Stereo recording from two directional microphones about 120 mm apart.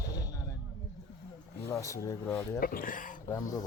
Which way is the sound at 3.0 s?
90° left.